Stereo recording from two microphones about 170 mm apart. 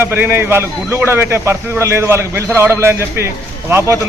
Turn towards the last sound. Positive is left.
turn(degrees=-15)  # may be behind; listen again after turning